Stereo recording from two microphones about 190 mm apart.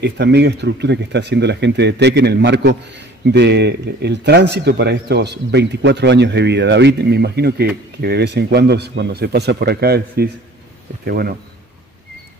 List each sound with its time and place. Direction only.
0.0 s speech: 65° right (ahead or behind)